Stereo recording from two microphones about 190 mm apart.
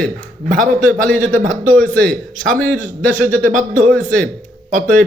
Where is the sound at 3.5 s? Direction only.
40° right (ahead or behind).